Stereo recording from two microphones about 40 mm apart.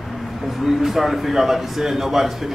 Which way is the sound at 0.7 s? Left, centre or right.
Centre.